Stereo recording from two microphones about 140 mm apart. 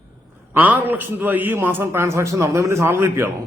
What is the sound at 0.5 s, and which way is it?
A man's voice, 15° right (ahead or behind).